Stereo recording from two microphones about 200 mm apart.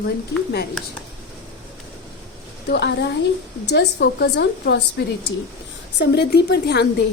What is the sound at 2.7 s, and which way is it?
A woman's voice, 60° left (ahead or behind).